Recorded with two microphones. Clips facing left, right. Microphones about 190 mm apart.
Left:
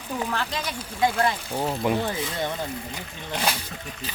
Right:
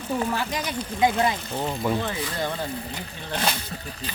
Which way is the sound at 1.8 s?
20° left (ahead or behind).